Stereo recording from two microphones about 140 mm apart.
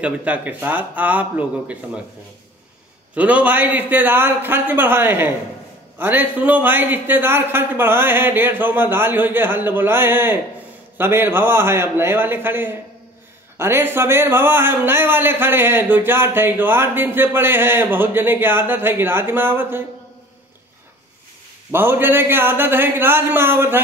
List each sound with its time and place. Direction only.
0.0 s a man's voice: 10° right (ahead or behind)
3.2 s a man's voice: 10° right (ahead or behind)
21.7 s a man's voice: 15° right (ahead or behind)